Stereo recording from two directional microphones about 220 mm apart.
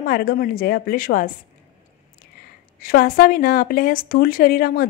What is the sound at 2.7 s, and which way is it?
A woman's voice, 40° left (ahead or behind).